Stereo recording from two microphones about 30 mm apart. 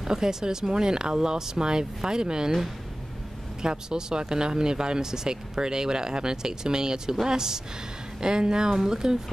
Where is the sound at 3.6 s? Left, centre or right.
Right.